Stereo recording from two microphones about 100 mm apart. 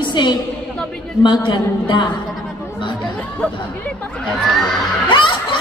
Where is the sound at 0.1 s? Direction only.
50° left (ahead or behind).